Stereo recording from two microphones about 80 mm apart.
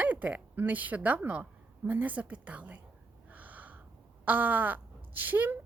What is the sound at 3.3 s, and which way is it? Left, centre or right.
Snort, centre.